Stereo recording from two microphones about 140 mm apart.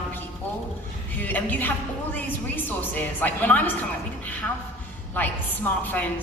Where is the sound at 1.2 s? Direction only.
10° left (ahead or behind).